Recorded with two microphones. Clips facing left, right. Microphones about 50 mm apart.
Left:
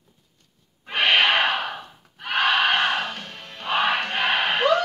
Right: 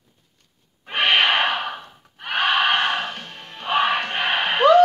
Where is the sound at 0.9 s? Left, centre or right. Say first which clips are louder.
Right 1 dB; right.